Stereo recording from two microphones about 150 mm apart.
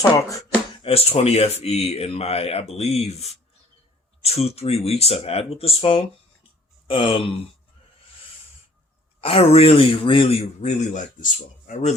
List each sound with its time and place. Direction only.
0.8 s speech: 40° left (ahead or behind)
6.8 s a sound: 35° left (ahead or behind)
9.2 s speech: 40° left (ahead or behind)